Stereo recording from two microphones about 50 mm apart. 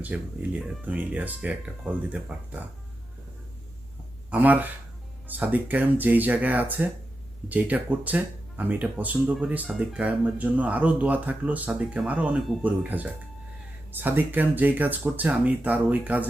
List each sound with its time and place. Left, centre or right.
0.9 s speech: right
4.3 s speech: right
12.6 s speech: right